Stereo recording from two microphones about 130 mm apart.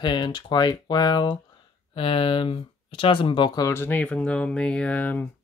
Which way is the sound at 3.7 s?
15° left (ahead or behind).